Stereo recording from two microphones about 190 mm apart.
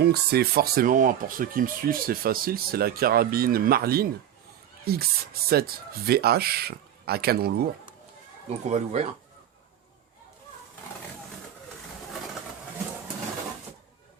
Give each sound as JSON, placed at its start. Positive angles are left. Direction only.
{"t": 0.0, "sound": "speech", "side_deg": -55}
{"t": 8.7, "sound": "speech", "side_deg": -35}